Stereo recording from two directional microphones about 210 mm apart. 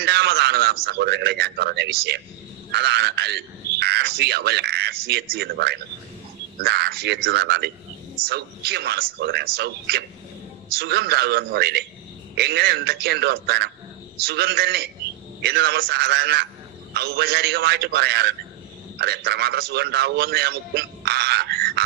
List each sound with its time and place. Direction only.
0.0 s a man's voice: 50° right (ahead or behind)